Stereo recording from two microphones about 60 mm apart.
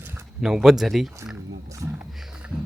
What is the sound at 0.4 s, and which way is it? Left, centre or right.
Speech, centre.